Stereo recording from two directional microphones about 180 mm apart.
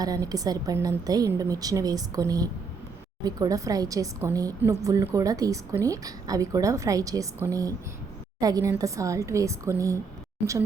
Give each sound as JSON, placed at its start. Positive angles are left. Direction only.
{"t": 0.0, "sound": "a woman's voice", "side_deg": -20}